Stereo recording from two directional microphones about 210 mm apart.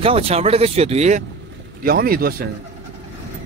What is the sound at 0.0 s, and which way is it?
Speech, 30° right (ahead or behind).